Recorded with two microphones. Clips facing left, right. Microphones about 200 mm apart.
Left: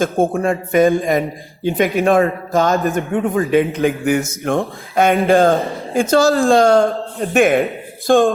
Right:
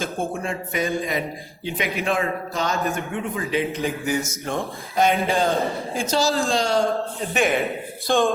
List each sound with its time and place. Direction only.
0.0 s a man's voice: 55° left (ahead or behind)
2.7 s speech: centre (ahead or behind)
3.1 s a man's voice: 50° left (ahead or behind)